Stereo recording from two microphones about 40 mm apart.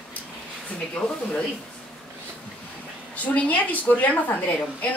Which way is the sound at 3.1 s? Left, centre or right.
Left.